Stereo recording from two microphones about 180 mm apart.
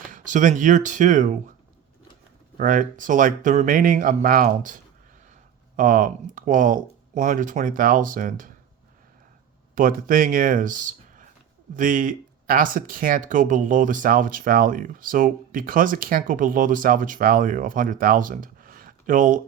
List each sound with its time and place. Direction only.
0.1 s speech: 45° right (ahead or behind)
2.6 s speech: 50° right (ahead or behind)
9.7 s speech: 50° right (ahead or behind)